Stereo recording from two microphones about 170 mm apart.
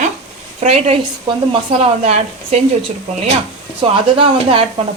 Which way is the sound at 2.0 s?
40° right (ahead or behind).